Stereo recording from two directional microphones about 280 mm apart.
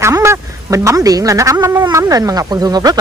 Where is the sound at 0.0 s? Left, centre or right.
Centre.